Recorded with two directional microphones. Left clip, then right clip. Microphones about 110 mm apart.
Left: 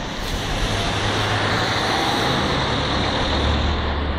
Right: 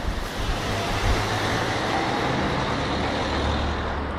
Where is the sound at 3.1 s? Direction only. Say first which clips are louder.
Left 4 dB; 5° right (ahead or behind).